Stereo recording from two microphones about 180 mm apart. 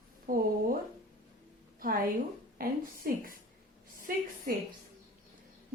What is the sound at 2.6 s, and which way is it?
Speech, 50° right (ahead or behind).